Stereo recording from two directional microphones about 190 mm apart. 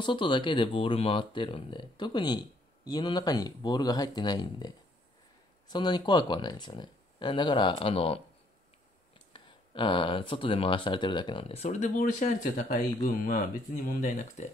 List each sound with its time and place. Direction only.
0.0 s speech: 25° left (ahead or behind)
9.3 s speech: 25° left (ahead or behind)